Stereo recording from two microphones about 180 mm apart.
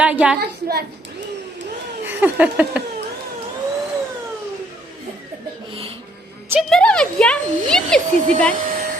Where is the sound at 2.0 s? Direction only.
10° right (ahead or behind).